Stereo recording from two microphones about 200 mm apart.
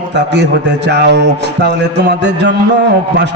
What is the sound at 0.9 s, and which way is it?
A man's voice, 60° right (ahead or behind).